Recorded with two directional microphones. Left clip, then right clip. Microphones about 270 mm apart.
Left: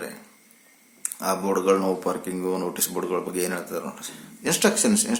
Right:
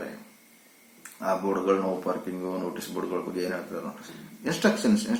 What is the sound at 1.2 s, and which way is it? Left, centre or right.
Speech, left.